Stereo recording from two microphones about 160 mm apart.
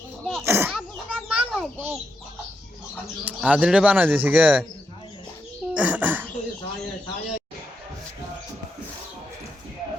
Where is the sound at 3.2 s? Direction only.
10° right (ahead or behind).